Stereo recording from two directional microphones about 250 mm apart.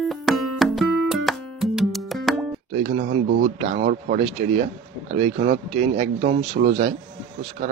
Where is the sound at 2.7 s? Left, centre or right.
Right.